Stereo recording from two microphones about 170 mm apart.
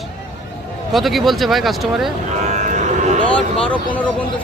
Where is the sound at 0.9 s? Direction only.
Centre (ahead or behind).